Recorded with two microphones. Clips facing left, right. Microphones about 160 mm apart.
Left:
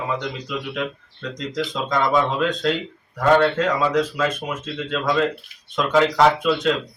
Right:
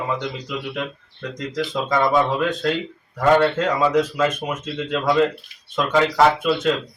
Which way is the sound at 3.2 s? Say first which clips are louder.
Even; 5° right (ahead or behind).